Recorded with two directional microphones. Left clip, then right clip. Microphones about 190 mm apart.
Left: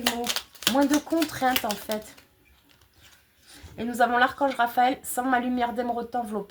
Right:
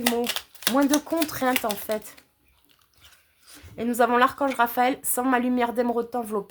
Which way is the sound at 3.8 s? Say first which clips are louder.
Right 2 dB; 40° right (ahead or behind).